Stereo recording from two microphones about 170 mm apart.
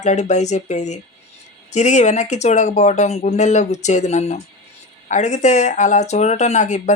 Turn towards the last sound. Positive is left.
turn(degrees=45)  # may be behind; listen again after turning